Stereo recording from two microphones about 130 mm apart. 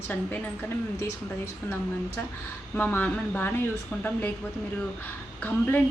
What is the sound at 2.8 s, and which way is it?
Speech, 15° left (ahead or behind).